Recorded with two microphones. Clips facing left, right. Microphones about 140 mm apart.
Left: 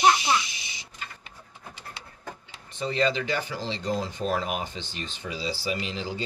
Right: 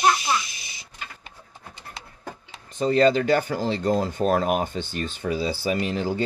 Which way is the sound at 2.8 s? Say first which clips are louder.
Right 7 dB; 45° right (ahead or behind).